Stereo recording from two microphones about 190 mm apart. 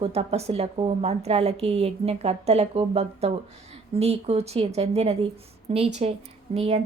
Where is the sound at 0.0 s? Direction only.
30° right (ahead or behind).